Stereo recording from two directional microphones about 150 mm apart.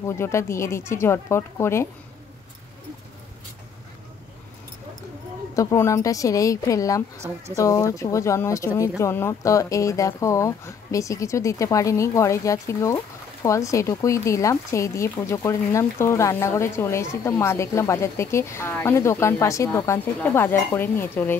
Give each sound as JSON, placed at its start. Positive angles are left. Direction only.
{"t": 0.0, "sound": "speech", "side_deg": 20}
{"t": 5.5, "sound": "speech", "side_deg": 20}